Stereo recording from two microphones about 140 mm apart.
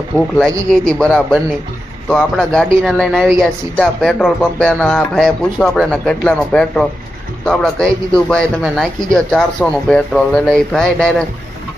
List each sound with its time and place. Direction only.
0.1 s speech: 15° right (ahead or behind)
0.7 s a man's voice: 5° left (ahead or behind)